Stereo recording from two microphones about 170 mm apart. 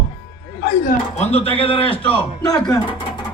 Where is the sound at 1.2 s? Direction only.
40° left (ahead or behind).